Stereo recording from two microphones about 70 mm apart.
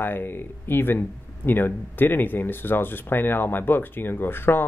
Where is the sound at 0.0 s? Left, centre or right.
Left.